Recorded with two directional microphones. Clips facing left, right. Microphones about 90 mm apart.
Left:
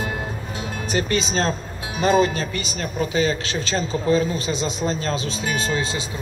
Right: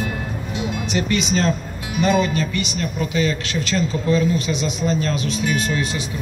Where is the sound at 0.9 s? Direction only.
35° left (ahead or behind).